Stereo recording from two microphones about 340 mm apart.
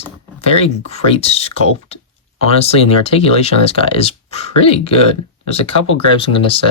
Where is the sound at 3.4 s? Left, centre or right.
Centre.